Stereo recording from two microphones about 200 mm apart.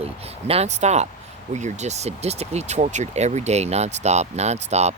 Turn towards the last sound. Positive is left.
turn(degrees=-35)  # may be behind; listen again after turning